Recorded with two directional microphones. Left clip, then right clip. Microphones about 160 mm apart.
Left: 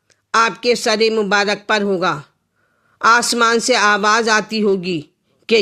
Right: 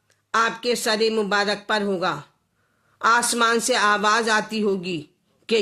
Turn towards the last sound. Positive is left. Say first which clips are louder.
# left 7 dB
turn(degrees=35)  # may be behind; listen again after turning